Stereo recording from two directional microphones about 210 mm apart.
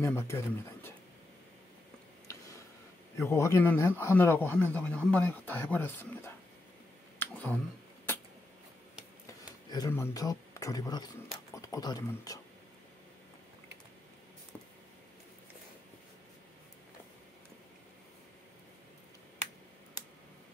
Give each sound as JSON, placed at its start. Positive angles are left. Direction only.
{"t": 0.0, "sound": "a man's voice", "side_deg": 10}
{"t": 2.2, "sound": "a sound", "side_deg": 15}
{"t": 3.2, "sound": "a man's voice", "side_deg": 15}
{"t": 7.2, "sound": "clicking", "side_deg": 10}
{"t": 9.7, "sound": "a man's voice", "side_deg": 15}